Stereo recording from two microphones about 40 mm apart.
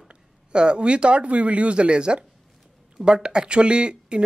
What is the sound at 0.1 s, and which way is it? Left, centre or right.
Speech, right.